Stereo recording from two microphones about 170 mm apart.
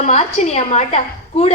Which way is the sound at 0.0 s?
40° left (ahead or behind).